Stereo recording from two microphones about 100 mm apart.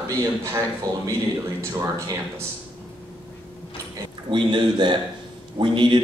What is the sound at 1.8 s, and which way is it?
Speech, 30° right (ahead or behind).